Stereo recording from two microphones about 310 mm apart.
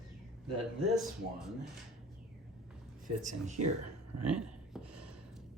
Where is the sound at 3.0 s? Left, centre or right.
Right.